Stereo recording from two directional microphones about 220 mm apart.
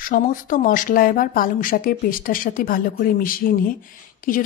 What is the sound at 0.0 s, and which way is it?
A woman's voice, 40° left (ahead or behind).